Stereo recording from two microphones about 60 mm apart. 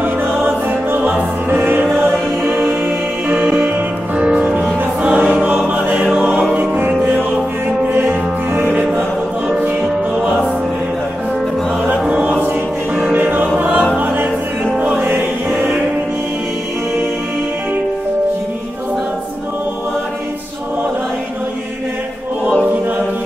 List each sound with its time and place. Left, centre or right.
0.7 s music: right
3.3 s music: right
4.2 s music: centre
6.0 s music: centre
6.5 s music: right
9.5 s music: centre
12.1 s music: right
13.9 s choir: right
15.0 s music: right